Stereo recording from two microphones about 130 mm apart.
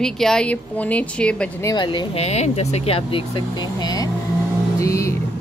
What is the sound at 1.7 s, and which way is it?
Speech, 35° left (ahead or behind).